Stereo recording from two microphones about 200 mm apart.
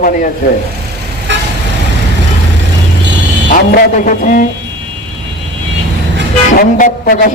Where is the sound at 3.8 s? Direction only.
40° left (ahead or behind).